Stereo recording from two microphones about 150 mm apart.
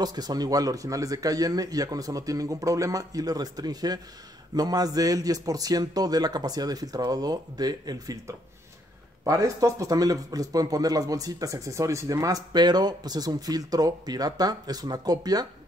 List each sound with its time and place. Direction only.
0.0 s speech: 25° right (ahead or behind)